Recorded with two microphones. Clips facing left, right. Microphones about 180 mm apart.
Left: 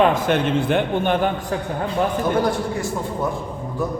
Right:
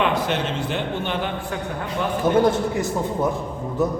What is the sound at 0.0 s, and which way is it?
A man's voice, 45° left (ahead or behind).